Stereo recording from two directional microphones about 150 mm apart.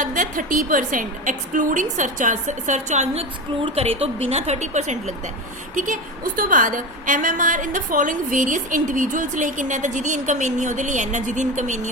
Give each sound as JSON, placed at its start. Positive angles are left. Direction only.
{"t": 0.0, "sound": "a woman's voice", "side_deg": -65}